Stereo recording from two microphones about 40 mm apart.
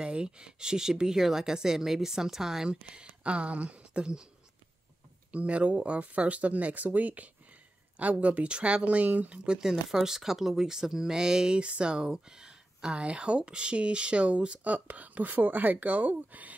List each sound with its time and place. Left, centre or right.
0.0 s speech: right
2.7 s speech: right
5.3 s speech: right
9.3 s speech: right